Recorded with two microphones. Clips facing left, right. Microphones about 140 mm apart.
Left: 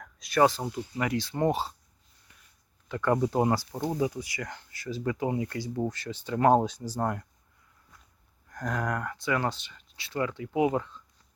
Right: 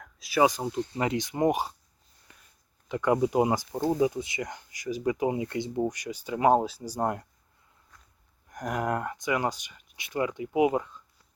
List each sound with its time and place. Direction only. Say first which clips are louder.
0.0 s a sound: even; centre (ahead or behind)
0.4 s speech: right 1 dB; 15° right (ahead or behind)
2.9 s speech: right 2 dB; 15° right (ahead or behind)
8.4 s speech: right 2 dB; 20° right (ahead or behind)